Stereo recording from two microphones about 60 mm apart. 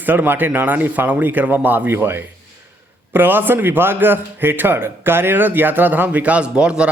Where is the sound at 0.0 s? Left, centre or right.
Right.